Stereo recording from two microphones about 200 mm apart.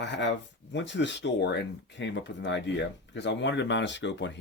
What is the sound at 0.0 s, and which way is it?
Speech, 60° left (ahead or behind).